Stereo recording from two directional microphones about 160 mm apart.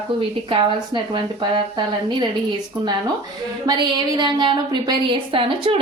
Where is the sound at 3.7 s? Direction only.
25° right (ahead or behind).